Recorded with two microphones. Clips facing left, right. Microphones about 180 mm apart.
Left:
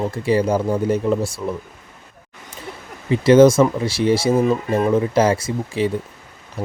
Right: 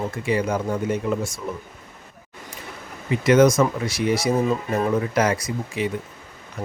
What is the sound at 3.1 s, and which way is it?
Speech, 30° left (ahead or behind).